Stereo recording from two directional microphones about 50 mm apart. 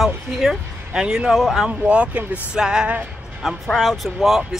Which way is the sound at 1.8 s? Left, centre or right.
Right.